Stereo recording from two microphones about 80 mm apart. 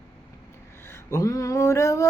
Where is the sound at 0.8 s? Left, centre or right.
Left.